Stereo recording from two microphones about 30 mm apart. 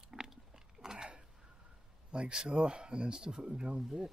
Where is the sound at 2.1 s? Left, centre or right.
Right.